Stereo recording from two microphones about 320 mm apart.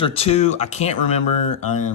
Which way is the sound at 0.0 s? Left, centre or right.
Centre.